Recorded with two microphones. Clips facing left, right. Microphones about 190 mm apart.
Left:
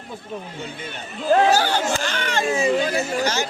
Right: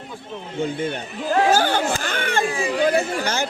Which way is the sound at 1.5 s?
50° right (ahead or behind).